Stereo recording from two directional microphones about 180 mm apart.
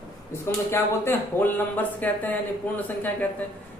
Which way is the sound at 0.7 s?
10° left (ahead or behind).